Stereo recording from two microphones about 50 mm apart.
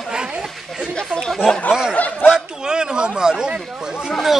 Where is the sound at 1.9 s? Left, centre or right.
Left.